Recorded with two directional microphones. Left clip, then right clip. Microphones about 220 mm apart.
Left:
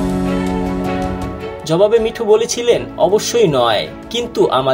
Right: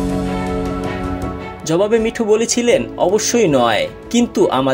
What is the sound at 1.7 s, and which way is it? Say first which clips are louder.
Speech: left 3 dB; 25° right (ahead or behind).